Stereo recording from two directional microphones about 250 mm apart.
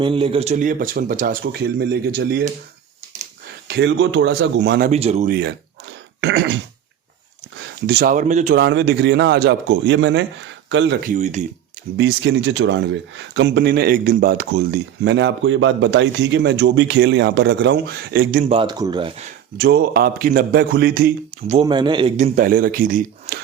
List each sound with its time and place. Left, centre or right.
0.0 s speech: right
3.7 s speech: right
4.9 s speech: right
5.3 s speech: right
8.6 s speech: right
11.1 s speech: right
11.9 s speech: right
18.4 s speech: centre
19.5 s speech: right
21.5 s speech: right
22.4 s speech: right